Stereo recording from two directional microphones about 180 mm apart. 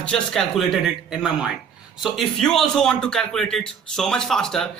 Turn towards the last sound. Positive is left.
turn(degrees=0)  # may be behind; listen again after turning